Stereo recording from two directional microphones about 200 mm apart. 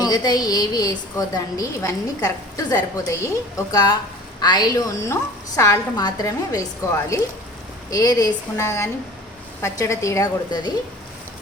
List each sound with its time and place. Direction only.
0.0 s a woman's voice: 20° left (ahead or behind)